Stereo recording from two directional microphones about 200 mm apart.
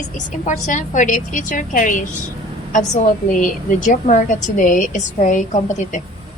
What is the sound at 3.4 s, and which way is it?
A woman's voice, 40° left (ahead or behind).